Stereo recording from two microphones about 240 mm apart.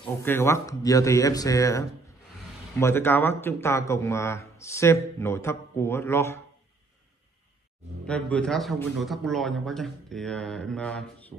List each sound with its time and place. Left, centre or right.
0.2 s a man's voice: centre
8.1 s speech: centre